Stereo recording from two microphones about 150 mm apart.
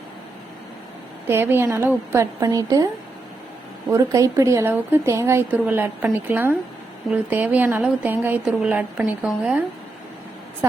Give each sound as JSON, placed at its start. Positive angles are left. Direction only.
{"t": 1.3, "sound": "a woman's voice", "side_deg": -15}
{"t": 3.9, "sound": "a woman's voice", "side_deg": -20}